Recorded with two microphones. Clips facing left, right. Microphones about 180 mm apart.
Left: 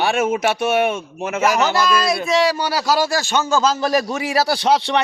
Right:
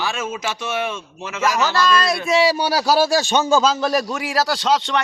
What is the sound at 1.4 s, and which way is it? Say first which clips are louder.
Speech: left 2 dB; 15° left (ahead or behind).